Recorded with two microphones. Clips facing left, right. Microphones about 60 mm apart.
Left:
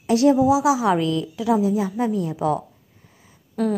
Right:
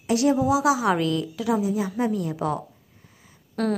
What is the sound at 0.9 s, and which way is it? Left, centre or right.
A woman's voice, right.